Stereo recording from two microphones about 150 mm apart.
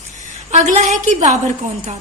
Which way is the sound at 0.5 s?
55° right (ahead or behind).